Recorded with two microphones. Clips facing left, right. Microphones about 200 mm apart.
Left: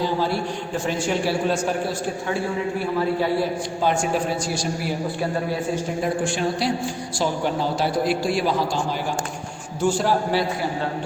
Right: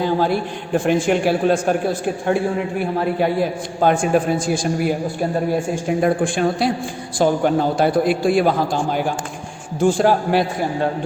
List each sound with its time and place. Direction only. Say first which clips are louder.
0.7 s a man's voice: right 9 dB; 55° right (ahead or behind)
3.8 s a man's voice: right 7 dB; 55° right (ahead or behind)
9.8 s a man's voice: right 5 dB; 55° right (ahead or behind)